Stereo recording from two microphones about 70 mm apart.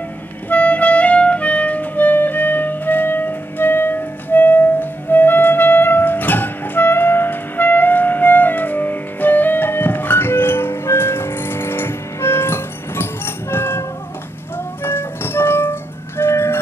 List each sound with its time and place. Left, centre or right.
0.5 s clarinet: left
14.8 s music: left